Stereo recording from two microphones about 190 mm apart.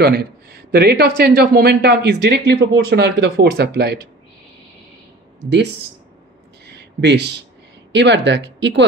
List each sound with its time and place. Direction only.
0.0 s a man's voice: 55° right (ahead or behind)
6.6 s a sound: 65° right (ahead or behind)
7.9 s speech: 65° right (ahead or behind)